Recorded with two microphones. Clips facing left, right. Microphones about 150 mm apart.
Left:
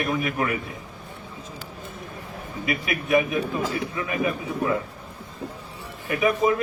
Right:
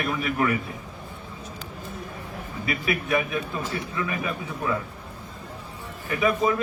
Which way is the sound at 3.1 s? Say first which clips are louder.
Left 6 dB; 20° left (ahead or behind).